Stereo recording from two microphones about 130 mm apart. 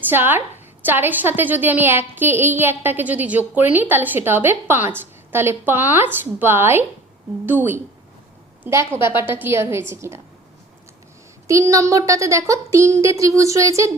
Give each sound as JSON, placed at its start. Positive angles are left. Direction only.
{"t": 0.1, "sound": "a woman's voice", "side_deg": -15}
{"t": 8.9, "sound": "speech", "side_deg": -20}
{"t": 11.4, "sound": "speech", "side_deg": -25}